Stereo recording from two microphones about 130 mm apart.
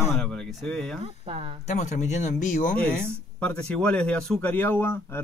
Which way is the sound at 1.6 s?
65° left (ahead or behind).